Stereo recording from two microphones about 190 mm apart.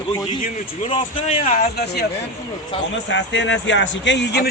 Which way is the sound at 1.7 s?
55° left (ahead or behind).